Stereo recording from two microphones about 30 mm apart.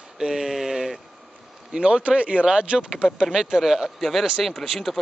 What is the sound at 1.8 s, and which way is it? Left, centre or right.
Speech, right.